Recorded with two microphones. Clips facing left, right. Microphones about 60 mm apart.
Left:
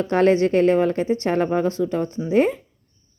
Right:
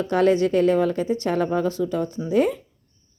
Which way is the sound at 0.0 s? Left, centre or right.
Left.